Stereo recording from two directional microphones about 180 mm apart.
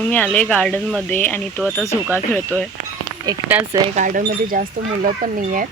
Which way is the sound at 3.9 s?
50° right (ahead or behind).